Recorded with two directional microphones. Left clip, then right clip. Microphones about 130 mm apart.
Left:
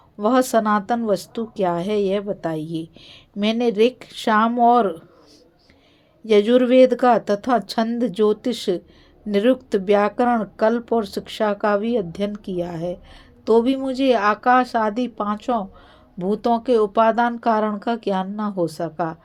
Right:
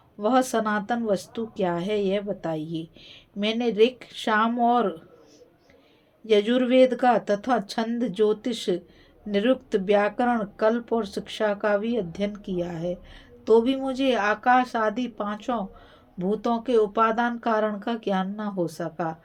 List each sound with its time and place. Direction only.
0.2 s a woman's voice: 45° left (ahead or behind)
6.2 s a woman's voice: 45° left (ahead or behind)